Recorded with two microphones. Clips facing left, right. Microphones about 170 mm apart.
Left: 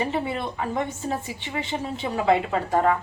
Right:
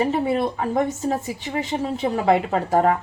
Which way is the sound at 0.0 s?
40° right (ahead or behind).